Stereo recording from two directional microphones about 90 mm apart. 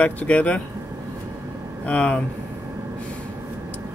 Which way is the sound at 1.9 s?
15° left (ahead or behind).